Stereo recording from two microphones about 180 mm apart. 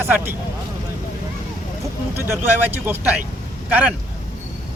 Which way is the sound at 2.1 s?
10° right (ahead or behind).